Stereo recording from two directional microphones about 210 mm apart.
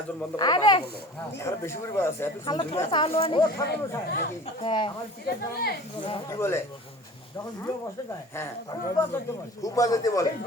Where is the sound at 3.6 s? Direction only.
50° left (ahead or behind).